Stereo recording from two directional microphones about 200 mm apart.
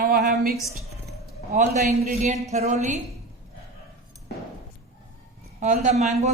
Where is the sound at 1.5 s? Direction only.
35° right (ahead or behind).